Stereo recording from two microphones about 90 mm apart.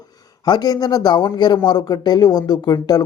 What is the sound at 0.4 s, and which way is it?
Speech, 50° left (ahead or behind).